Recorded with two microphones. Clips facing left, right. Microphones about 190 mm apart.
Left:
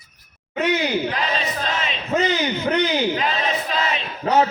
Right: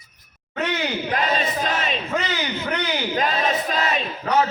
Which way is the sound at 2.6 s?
25° left (ahead or behind).